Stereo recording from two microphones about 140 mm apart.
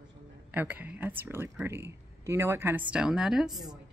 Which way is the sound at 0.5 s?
10° right (ahead or behind).